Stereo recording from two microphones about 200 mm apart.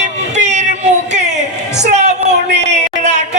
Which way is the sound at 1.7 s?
35° right (ahead or behind).